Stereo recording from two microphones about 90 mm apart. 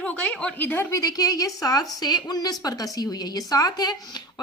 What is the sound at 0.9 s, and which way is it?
A woman's voice, 45° left (ahead or behind).